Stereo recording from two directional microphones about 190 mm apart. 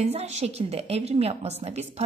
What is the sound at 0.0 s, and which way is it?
A woman's voice, 35° right (ahead or behind).